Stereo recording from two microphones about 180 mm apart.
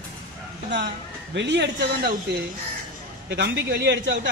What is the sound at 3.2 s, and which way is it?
A man's voice, 70° right (ahead or behind).